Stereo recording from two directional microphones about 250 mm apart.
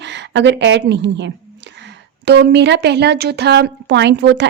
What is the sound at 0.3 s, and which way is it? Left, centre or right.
A woman's voice, right.